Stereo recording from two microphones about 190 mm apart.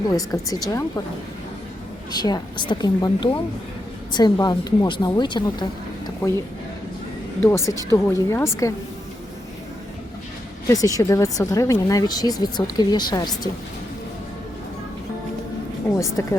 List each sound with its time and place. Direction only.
0.1 s speech: 20° left (ahead or behind)
2.1 s speech: 20° left (ahead or behind)
7.4 s speech: 15° left (ahead or behind)
10.7 s speech: 20° left (ahead or behind)
16.0 s speech: 15° left (ahead or behind)